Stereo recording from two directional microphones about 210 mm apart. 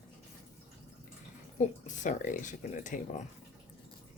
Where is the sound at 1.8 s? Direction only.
35° left (ahead or behind).